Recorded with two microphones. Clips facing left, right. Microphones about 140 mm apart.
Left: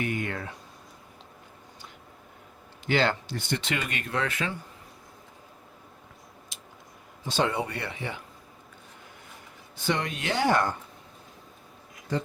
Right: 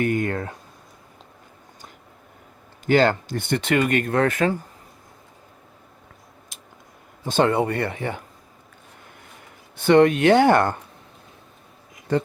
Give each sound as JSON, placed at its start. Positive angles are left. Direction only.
{"t": 0.0, "sound": "a sound", "side_deg": -45}
{"t": 2.8, "sound": "speech", "side_deg": -45}
{"t": 6.5, "sound": "a sound", "side_deg": -50}
{"t": 7.3, "sound": "speech", "side_deg": -55}
{"t": 9.7, "sound": "speech", "side_deg": -60}
{"t": 12.1, "sound": "speech", "side_deg": -60}